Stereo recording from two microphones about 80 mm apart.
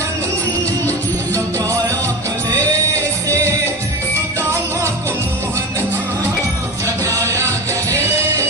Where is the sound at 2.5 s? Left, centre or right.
Right.